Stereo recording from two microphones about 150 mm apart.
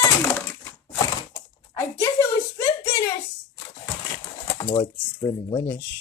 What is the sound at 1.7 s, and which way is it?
Speech, 15° left (ahead or behind).